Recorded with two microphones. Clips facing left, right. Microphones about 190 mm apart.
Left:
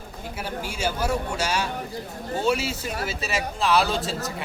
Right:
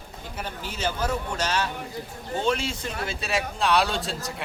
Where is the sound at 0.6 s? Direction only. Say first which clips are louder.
Left 1 dB; 10° left (ahead or behind).